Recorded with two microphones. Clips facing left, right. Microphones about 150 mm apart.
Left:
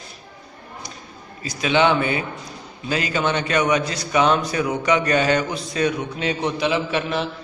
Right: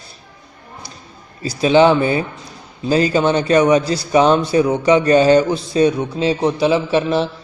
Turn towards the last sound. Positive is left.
turn(degrees=-30)  # may be behind; listen again after turning